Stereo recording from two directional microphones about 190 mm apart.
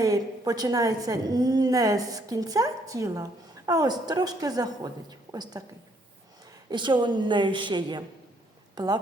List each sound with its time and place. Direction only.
0.0 s a woman's voice: 20° right (ahead or behind)
6.7 s a woman's voice: 25° right (ahead or behind)